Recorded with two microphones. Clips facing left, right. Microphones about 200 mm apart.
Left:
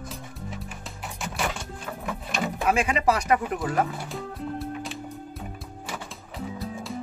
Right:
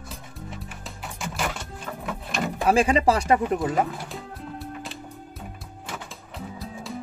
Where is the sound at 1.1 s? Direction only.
Centre (ahead or behind).